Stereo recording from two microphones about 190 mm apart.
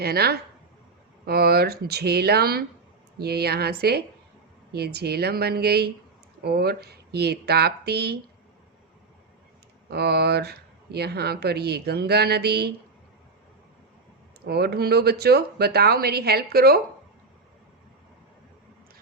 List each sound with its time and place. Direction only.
0.0 s speech: 55° right (ahead or behind)
9.9 s speech: 55° right (ahead or behind)
14.4 s speech: 60° right (ahead or behind)